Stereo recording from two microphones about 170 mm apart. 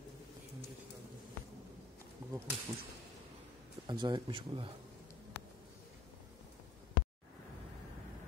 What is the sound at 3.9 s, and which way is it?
Speech, 25° right (ahead or behind).